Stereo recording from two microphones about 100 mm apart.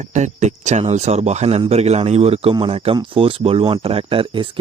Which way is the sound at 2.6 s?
70° right (ahead or behind).